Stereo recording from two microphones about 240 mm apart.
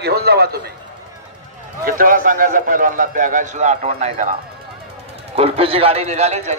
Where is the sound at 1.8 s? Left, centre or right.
Right.